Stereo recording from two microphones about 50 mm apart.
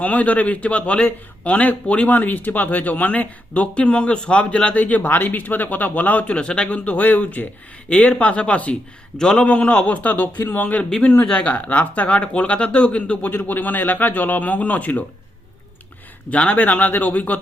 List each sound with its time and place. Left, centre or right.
0.0 s speech: left
2.0 s speech: left
9.1 s a man's voice: centre
9.5 s speech: left
10.4 s speech: left
11.2 s speech: left
13.5 s speech: left
16.3 s speech: left